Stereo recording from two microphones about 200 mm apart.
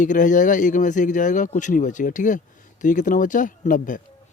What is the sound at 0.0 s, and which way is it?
Speech, 40° left (ahead or behind).